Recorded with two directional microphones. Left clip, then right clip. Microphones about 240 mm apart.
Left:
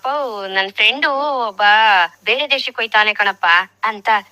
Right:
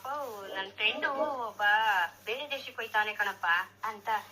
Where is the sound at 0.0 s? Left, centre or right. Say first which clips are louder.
Left 17 dB; left.